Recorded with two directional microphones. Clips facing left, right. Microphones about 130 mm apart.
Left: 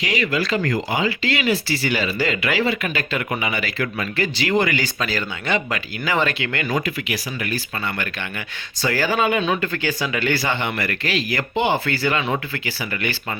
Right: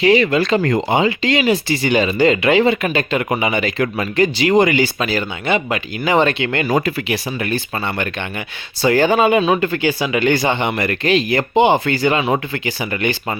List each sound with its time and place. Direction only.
0.0 s speech: 30° right (ahead or behind)
6.7 s speech: 35° right (ahead or behind); by 13.1 s 20° right (ahead or behind)